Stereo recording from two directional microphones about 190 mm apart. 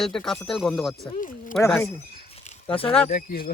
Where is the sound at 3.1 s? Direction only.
50° left (ahead or behind).